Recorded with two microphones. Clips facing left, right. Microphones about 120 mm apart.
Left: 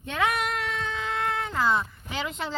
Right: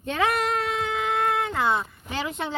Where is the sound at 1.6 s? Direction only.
25° right (ahead or behind).